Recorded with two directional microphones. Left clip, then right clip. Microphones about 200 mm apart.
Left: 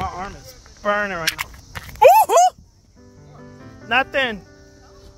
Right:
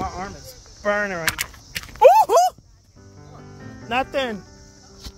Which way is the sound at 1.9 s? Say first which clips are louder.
Left 1 dB; 20° right (ahead or behind).